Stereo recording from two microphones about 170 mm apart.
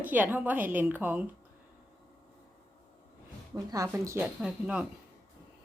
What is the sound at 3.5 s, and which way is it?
Speech, 20° right (ahead or behind).